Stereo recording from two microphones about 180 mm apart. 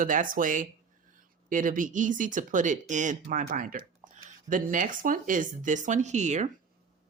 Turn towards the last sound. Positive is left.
turn(degrees=-40)  # may be behind; listen again after turning